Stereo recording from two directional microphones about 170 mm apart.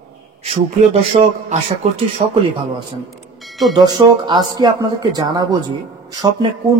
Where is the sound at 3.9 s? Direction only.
25° right (ahead or behind).